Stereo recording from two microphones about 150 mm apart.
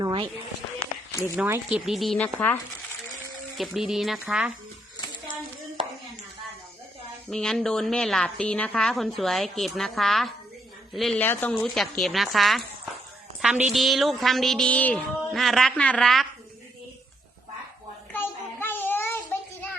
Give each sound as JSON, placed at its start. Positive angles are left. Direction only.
{"t": 0.0, "sound": "a sound", "side_deg": -30}
{"t": 1.2, "sound": "speech", "side_deg": -15}
{"t": 1.8, "sound": "a woman's voice", "side_deg": 0}
{"t": 3.6, "sound": "a woman's voice", "side_deg": 0}
{"t": 7.3, "sound": "a woman's voice", "side_deg": 5}
{"t": 11.2, "sound": "a woman's voice", "side_deg": 10}
{"t": 18.1, "sound": "child singing", "side_deg": 15}